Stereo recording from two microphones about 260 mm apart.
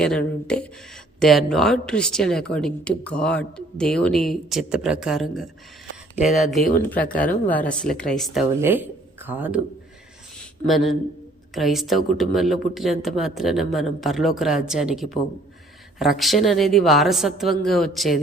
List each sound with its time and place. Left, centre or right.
0.4 s speech: centre
6.6 s speech: left
6.9 s speech: centre
10.7 s speech: centre